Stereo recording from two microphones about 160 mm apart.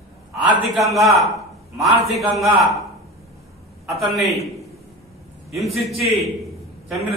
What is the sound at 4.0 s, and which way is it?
Speech, centre (ahead or behind).